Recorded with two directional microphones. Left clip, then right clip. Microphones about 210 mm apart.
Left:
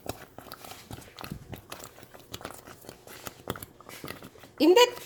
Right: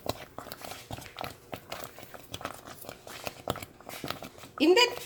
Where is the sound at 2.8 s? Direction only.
5° right (ahead or behind).